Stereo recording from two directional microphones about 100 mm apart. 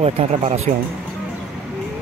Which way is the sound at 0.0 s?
80° right.